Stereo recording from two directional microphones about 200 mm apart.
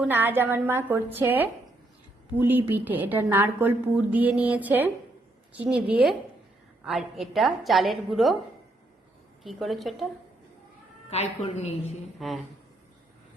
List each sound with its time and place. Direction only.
0.0 s a woman's voice: 10° right (ahead or behind)
9.4 s a woman's voice: centre (ahead or behind)
11.1 s speech: 30° left (ahead or behind)
12.2 s a woman's voice: centre (ahead or behind)